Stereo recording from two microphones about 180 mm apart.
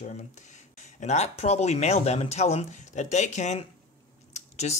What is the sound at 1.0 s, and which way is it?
Speech, 35° left (ahead or behind).